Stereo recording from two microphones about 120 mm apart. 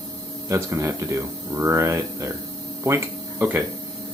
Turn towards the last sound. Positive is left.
turn(degrees=-20)  # may be behind; listen again after turning